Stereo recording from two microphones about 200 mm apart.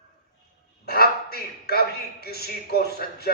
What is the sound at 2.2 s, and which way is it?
Speech, 50° left (ahead or behind).